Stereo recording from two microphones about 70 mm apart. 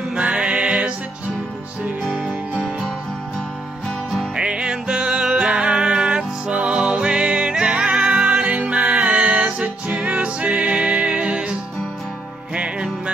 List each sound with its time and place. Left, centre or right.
0.1 s music: centre
2.0 s music: centre
4.4 s music: centre
12.5 s music: centre